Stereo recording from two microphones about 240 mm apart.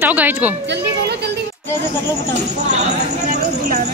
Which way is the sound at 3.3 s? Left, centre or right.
Right.